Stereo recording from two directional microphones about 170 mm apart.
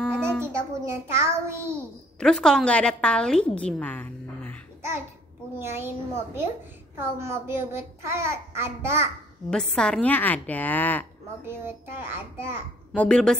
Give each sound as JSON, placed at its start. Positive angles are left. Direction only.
{"t": 0.2, "sound": "child singing", "side_deg": -15}
{"t": 2.1, "sound": "a woman's voice", "side_deg": 5}
{"t": 5.6, "sound": "a child's voice", "side_deg": -15}
{"t": 9.5, "sound": "a woman's voice", "side_deg": 5}
{"t": 11.4, "sound": "a child's voice", "side_deg": -15}
{"t": 12.9, "sound": "a woman's voice", "side_deg": 5}